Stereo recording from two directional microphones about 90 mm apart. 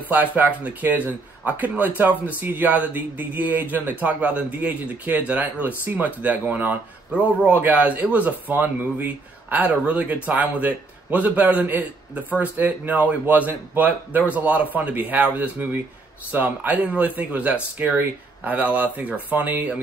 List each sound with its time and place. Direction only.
0.1 s a man's voice: 20° right (ahead or behind)